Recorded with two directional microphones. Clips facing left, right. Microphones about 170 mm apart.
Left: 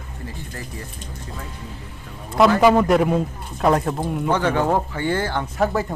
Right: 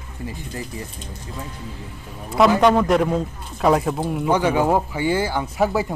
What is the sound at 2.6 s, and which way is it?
Speech, 5° left (ahead or behind).